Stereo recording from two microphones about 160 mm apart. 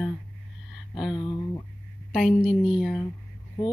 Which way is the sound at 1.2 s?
20° left (ahead or behind).